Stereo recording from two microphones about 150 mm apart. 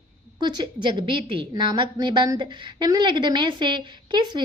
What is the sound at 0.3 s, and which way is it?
A woman's voice, 30° right (ahead or behind).